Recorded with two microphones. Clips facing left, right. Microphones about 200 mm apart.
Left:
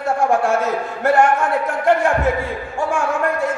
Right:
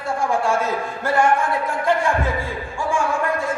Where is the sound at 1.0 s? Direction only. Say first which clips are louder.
Left 6 dB; 65° left (ahead or behind).